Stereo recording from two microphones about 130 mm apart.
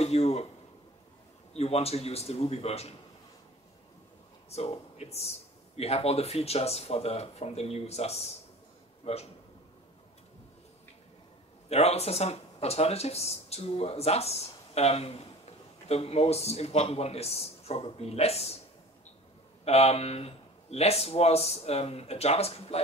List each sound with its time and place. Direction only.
0.0 s speech: 55° left (ahead or behind)
1.5 s speech: 50° left (ahead or behind)
4.5 s a man's voice: 55° left (ahead or behind)
11.7 s speech: 55° left (ahead or behind)
19.6 s speech: 55° left (ahead or behind)